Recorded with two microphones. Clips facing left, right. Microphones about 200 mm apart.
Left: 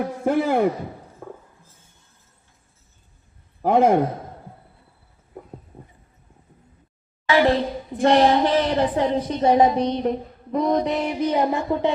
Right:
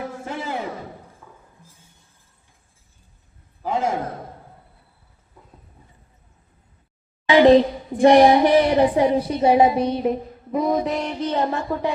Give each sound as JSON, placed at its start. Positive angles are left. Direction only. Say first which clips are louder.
{"t": 0.3, "sound": "a man's voice", "louder": "left 12 dB", "side_deg": 55}
{"t": 1.2, "sound": "a sound", "louder": "left 10 dB", "side_deg": 55}
{"t": 3.6, "sound": "a man's voice", "louder": "left 7 dB", "side_deg": 60}
{"t": 7.3, "sound": "a woman's voice", "louder": "right 6 dB", "side_deg": -20}